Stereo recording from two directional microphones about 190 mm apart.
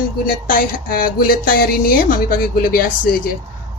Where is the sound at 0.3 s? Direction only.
45° left (ahead or behind).